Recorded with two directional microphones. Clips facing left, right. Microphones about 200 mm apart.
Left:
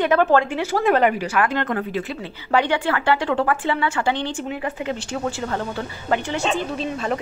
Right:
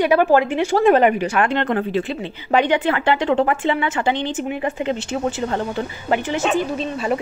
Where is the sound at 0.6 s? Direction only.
25° right (ahead or behind).